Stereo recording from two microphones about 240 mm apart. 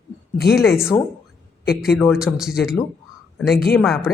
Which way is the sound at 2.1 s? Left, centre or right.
Centre.